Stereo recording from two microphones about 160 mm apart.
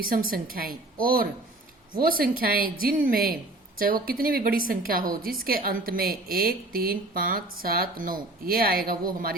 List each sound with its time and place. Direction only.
0.0 s a woman's voice: 65° right (ahead or behind)